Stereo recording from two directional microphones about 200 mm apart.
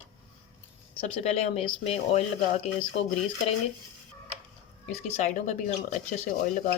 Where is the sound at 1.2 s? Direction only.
30° left (ahead or behind).